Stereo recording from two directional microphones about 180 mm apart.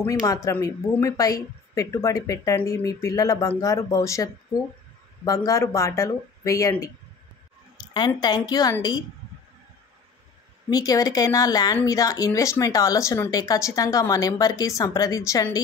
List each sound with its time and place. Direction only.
0.0 s speech: 20° left (ahead or behind)
10.7 s speech: 20° left (ahead or behind)